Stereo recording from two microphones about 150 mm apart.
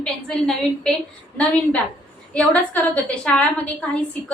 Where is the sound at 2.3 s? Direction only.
10° left (ahead or behind).